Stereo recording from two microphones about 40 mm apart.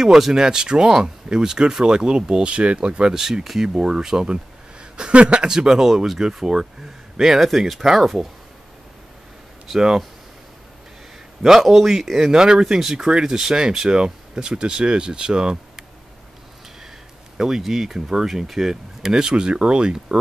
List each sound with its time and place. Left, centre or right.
0.0 s speech: centre; by 3.1 s right
3.1 s speech: centre
5.5 s speech: centre
9.8 s speech: centre
11.6 s speech: centre
12.3 s speech: centre
17.4 s speech: centre